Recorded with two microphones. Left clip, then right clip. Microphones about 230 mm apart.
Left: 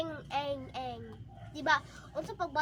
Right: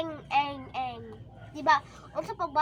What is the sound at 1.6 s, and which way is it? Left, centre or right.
Speech, centre.